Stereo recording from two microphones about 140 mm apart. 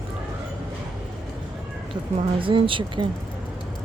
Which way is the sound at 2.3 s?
40° right (ahead or behind).